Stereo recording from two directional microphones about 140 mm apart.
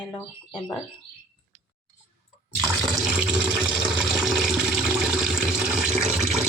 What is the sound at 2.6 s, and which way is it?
Water, 10° right (ahead or behind).